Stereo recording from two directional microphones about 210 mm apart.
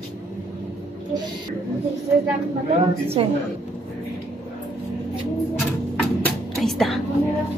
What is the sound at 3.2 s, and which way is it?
Speech, 25° right (ahead or behind).